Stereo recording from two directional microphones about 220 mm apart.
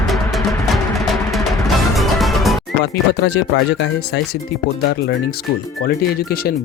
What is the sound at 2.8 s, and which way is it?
Speech, 50° left (ahead or behind).